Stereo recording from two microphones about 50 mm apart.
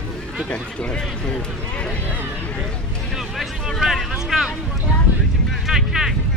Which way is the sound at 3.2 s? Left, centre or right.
Centre.